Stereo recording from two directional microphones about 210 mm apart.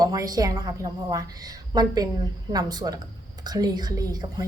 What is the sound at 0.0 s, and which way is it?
A woman's voice, 15° right (ahead or behind).